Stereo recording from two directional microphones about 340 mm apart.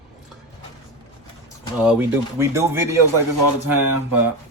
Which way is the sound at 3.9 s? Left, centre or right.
Right.